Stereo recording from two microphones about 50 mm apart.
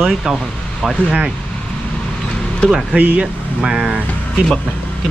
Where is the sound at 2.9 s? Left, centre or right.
Right.